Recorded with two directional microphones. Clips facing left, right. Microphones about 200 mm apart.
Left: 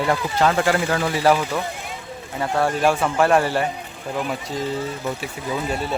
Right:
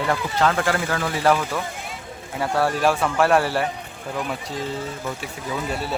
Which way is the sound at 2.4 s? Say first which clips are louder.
Left 1 dB; 5° right (ahead or behind).